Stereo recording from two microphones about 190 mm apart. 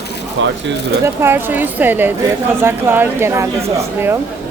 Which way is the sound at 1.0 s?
10° right (ahead or behind).